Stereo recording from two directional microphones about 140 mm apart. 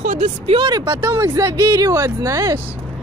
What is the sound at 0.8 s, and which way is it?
Speech, 15° right (ahead or behind).